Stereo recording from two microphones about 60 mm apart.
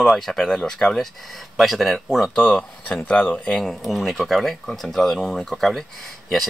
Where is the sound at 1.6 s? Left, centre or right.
Centre.